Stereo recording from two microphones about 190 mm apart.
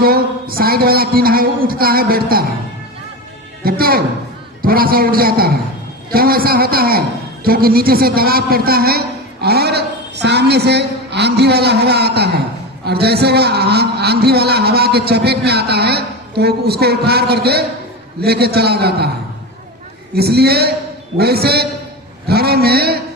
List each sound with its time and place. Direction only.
0.0 s a man's voice: 50° right (ahead or behind)
3.6 s a man's voice: 50° right (ahead or behind)
20.1 s a man's voice: 55° right (ahead or behind)